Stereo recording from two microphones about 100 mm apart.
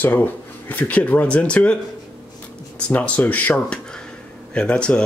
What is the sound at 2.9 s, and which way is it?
Speech, 15° left (ahead or behind).